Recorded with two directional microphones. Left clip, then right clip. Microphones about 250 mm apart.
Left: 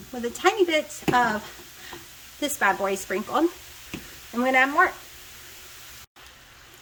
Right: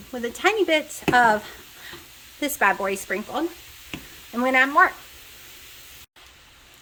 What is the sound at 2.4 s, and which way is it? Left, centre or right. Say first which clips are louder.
Speech: right 2 dB; centre.